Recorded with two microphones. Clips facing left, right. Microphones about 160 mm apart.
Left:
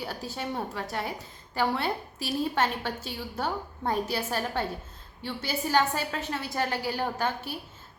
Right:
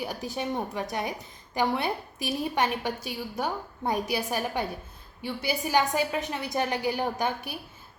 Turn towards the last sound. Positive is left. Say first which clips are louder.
# right 1 dB
turn(degrees=-15)  # may be behind; listen again after turning